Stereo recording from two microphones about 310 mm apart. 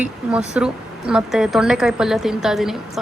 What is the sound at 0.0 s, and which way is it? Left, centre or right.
Speech, centre.